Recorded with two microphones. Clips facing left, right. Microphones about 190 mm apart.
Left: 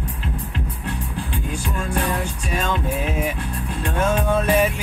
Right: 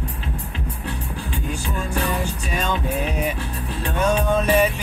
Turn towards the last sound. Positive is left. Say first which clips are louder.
# even
turn(degrees=5)  # may be behind; listen again after turning